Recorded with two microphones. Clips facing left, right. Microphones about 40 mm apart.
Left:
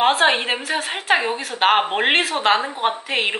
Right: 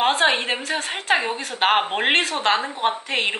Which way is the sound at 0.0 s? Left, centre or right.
Centre.